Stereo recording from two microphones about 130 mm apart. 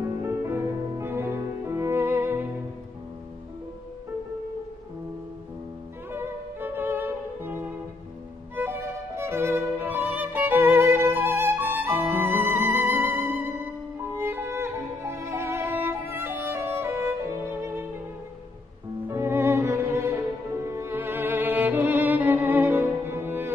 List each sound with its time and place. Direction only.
0.2 s music: 20° right (ahead or behind)
6.1 s violin: 15° right (ahead or behind)
13.9 s music: 20° right (ahead or behind)
19.0 s music: 15° right (ahead or behind)